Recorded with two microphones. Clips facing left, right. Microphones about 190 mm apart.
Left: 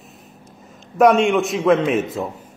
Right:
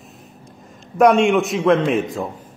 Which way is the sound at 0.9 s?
Centre (ahead or behind).